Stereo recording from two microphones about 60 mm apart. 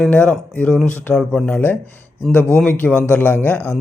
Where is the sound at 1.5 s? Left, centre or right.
Left.